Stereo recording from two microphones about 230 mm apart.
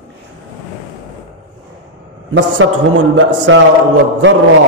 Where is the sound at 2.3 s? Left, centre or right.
Right.